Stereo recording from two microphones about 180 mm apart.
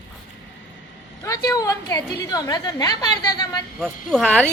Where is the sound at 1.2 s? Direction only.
20° left (ahead or behind).